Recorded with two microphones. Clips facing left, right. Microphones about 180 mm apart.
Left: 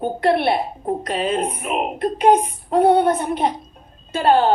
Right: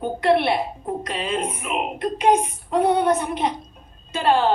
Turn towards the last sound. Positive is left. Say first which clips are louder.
# left 3 dB
turn(degrees=45)  # may be behind; listen again after turning